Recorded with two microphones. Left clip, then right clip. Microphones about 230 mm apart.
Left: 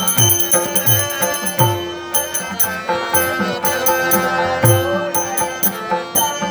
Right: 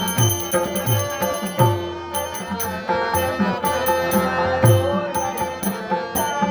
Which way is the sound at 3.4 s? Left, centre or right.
Centre.